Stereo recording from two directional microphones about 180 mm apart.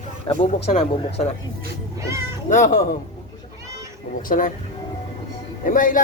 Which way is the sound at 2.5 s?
45° left (ahead or behind).